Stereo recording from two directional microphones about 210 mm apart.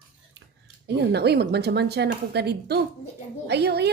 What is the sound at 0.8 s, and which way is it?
Speech, 50° right (ahead or behind).